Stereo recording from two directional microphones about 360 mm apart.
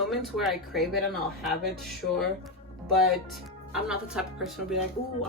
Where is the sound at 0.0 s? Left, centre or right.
Centre.